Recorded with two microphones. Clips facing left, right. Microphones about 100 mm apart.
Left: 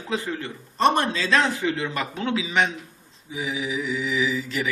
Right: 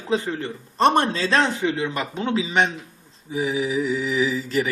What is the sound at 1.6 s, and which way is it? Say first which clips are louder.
Speech: right 2 dB; 15° right (ahead or behind).